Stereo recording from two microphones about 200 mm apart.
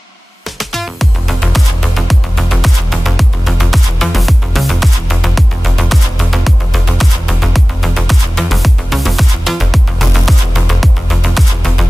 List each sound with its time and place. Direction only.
0.6 s music: centre (ahead or behind)